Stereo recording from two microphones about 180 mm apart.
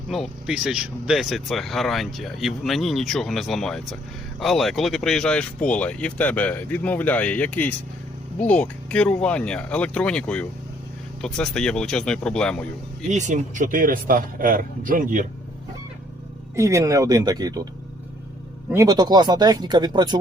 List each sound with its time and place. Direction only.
0.1 s speech: centre (ahead or behind)
13.1 s speech: 40° right (ahead or behind)
16.6 s speech: 15° right (ahead or behind)
18.7 s speech: 20° right (ahead or behind)